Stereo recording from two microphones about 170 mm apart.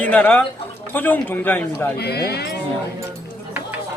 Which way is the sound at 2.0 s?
70° left (ahead or behind).